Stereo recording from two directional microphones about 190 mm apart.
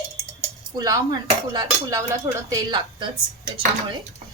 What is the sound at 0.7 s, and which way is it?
A woman's voice, 20° right (ahead or behind).